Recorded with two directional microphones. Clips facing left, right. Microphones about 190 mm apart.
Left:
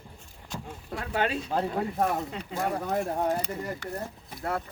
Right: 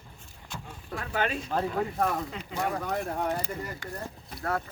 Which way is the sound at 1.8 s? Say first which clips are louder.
Left 1 dB; 20° left (ahead or behind).